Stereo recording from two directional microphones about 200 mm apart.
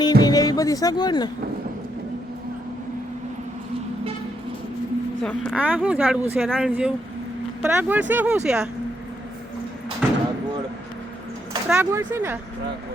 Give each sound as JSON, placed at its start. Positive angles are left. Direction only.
{"t": 0.0, "sound": "music", "side_deg": 20}
{"t": 5.2, "sound": "speech", "side_deg": 5}
{"t": 5.5, "sound": "speech", "side_deg": -5}
{"t": 10.0, "sound": "a sound", "side_deg": -5}
{"t": 11.7, "sound": "speech", "side_deg": -10}